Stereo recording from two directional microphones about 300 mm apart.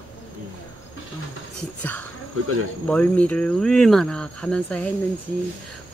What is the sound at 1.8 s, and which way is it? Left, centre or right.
Speech, centre.